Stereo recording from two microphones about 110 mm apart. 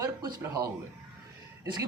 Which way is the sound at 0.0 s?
35° right (ahead or behind).